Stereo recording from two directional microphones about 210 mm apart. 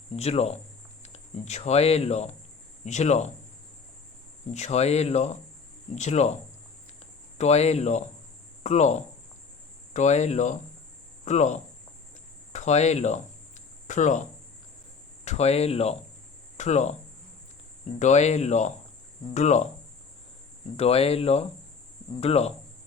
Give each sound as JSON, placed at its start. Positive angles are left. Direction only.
{"t": 0.2, "sound": "speech", "side_deg": 30}
{"t": 4.5, "sound": "speech", "side_deg": 30}
{"t": 18.0, "sound": "speech", "side_deg": 35}
{"t": 20.7, "sound": "speech", "side_deg": 30}